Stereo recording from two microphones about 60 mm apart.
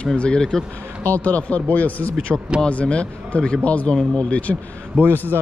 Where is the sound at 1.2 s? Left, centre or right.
Left.